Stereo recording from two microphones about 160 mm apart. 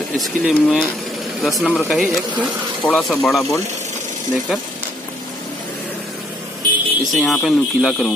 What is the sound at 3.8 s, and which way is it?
Sewing machine, 45° right (ahead or behind).